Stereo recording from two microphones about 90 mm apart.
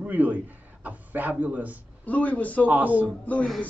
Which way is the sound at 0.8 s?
20° right (ahead or behind).